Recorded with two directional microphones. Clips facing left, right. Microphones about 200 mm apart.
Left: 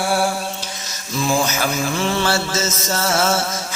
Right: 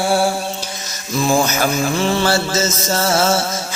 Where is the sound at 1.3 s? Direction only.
40° right (ahead or behind).